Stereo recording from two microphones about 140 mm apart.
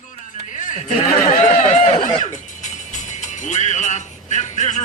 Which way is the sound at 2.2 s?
60° left (ahead or behind).